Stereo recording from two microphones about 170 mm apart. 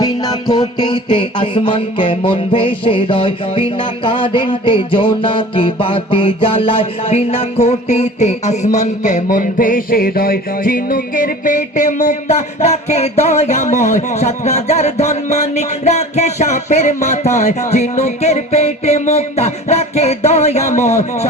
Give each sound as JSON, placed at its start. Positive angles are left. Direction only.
{"t": 0.0, "sound": "music", "side_deg": 25}